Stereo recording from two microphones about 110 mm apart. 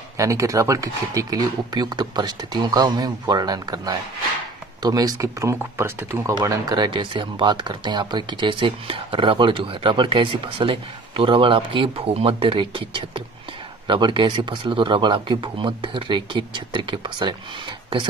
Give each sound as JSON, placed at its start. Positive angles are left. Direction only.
{"t": 0.2, "sound": "speech", "side_deg": -30}